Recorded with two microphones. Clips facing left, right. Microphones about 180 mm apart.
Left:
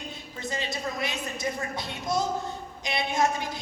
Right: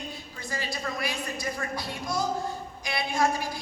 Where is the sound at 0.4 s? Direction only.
20° left (ahead or behind).